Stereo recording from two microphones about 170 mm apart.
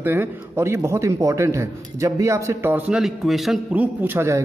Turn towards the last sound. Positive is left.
turn(degrees=-15)  # may be behind; listen again after turning